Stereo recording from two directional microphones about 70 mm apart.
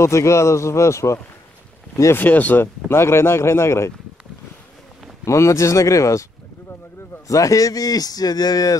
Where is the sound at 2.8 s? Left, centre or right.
Left.